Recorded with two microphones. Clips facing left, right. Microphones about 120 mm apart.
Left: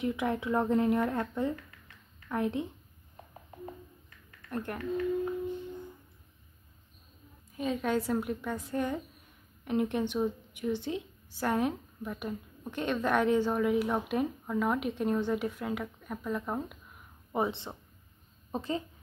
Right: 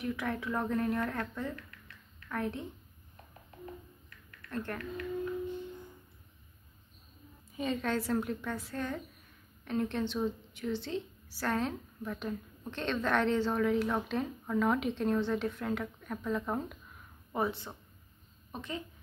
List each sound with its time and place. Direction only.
0.0 s speech: 20° left (ahead or behind)
4.5 s a woman's voice: 15° left (ahead or behind)
7.5 s a woman's voice: 5° left (ahead or behind)
17.3 s a woman's voice: 25° left (ahead or behind)